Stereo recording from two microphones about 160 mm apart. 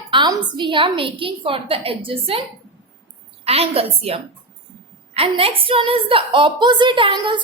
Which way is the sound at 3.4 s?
40° right (ahead or behind).